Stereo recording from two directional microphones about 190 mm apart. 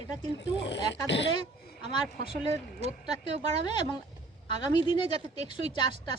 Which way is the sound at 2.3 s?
35° right (ahead or behind).